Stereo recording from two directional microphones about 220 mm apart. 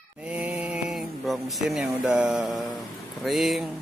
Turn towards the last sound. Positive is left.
turn(degrees=0)  # may be behind; listen again after turning